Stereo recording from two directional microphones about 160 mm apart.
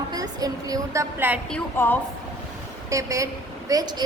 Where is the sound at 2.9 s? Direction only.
20° right (ahead or behind).